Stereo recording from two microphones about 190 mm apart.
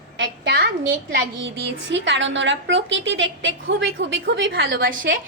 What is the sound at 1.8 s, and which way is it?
A woman's voice, 70° right (ahead or behind).